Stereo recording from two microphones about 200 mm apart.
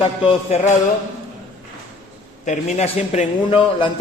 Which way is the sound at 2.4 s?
35° left (ahead or behind).